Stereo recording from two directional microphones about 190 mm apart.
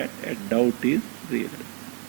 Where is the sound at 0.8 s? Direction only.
10° right (ahead or behind).